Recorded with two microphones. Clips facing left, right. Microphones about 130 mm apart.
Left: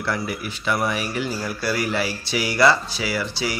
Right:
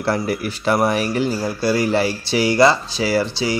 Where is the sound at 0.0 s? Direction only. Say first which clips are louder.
Right 6 dB; 40° right (ahead or behind).